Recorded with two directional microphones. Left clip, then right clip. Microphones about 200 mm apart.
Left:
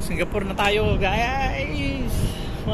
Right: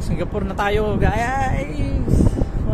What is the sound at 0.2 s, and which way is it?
Speech, 15° right (ahead or behind).